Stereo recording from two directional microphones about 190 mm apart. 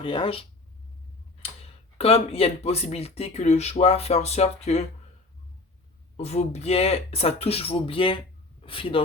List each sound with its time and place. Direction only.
0.0 s speech: 25° left (ahead or behind)
2.0 s speech: 30° left (ahead or behind)
6.1 s speech: 35° left (ahead or behind)